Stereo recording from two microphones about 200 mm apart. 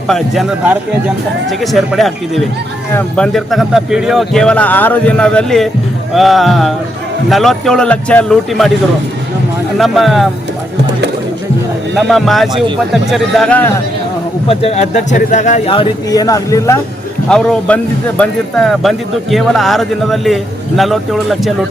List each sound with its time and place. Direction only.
0.1 s speech: 5° right (ahead or behind)
9.7 s speech: centre (ahead or behind)
11.9 s speech: centre (ahead or behind)
14.4 s a man's voice: 30° left (ahead or behind)
17.2 s speech: 5° left (ahead or behind)